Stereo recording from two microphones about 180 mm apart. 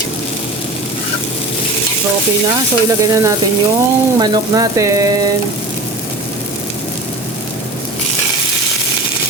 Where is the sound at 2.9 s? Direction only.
20° right (ahead or behind).